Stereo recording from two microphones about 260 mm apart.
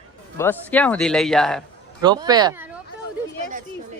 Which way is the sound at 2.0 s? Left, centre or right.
Centre.